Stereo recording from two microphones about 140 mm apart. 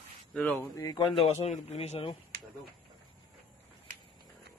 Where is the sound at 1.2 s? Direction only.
45° left (ahead or behind).